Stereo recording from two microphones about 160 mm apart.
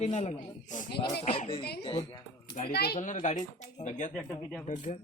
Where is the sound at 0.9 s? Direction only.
30° left (ahead or behind).